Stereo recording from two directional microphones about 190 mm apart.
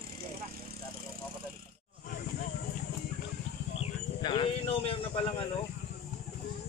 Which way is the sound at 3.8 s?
25° left (ahead or behind).